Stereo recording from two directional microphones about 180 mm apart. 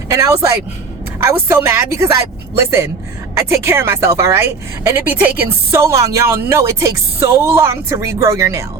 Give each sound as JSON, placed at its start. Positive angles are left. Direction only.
{"t": 0.1, "sound": "a woman's voice", "side_deg": -15}